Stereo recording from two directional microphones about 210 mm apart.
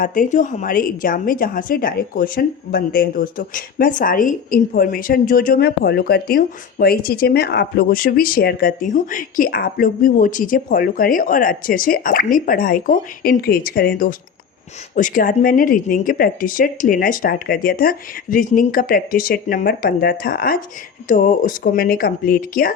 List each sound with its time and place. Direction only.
0.0 s a woman's voice: 40° left (ahead or behind)